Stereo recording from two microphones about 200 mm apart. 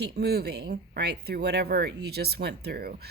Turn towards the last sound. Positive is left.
turn(degrees=-50)  # may be behind; listen again after turning